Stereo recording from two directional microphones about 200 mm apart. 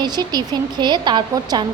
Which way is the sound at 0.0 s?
20° right (ahead or behind).